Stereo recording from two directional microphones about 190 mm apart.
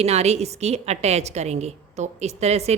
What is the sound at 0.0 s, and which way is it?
Speech, 35° right (ahead or behind).